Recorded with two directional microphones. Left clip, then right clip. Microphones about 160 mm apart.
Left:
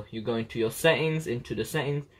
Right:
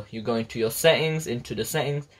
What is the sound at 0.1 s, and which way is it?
Speech, 15° right (ahead or behind).